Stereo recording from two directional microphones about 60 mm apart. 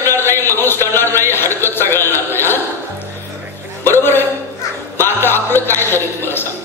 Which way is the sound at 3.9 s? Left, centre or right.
Left.